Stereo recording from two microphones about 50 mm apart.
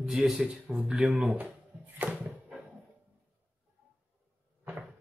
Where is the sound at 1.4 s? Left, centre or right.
Right.